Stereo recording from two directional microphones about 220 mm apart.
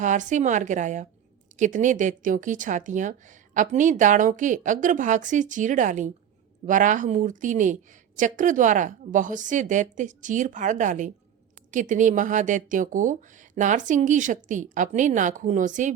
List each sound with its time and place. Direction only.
0.0 s speech: 35° right (ahead or behind)